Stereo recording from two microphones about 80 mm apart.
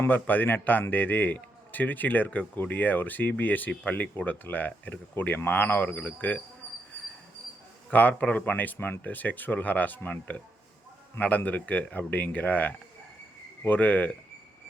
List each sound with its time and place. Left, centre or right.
0.1 s speech: left
7.9 s speech: centre